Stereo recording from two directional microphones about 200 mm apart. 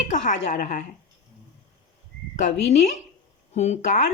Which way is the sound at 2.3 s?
35° left (ahead or behind).